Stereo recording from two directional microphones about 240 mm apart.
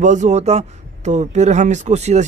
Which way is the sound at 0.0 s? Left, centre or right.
Right.